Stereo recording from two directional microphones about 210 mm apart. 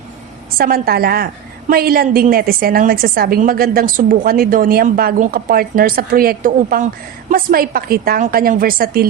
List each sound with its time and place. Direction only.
0.6 s a woman's voice: 45° right (ahead or behind)